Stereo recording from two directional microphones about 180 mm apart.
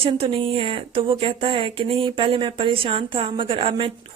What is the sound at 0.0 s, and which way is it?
A woman's voice, 30° right (ahead or behind).